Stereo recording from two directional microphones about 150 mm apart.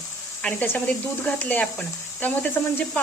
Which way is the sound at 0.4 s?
10° left (ahead or behind).